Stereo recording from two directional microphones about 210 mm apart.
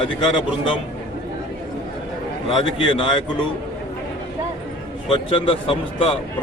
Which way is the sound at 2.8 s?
20° left (ahead or behind).